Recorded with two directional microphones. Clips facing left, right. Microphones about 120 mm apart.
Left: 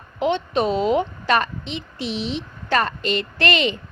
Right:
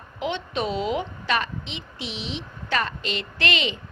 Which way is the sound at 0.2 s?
40° left (ahead or behind).